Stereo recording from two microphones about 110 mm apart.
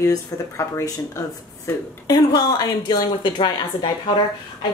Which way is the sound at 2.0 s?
35° left (ahead or behind).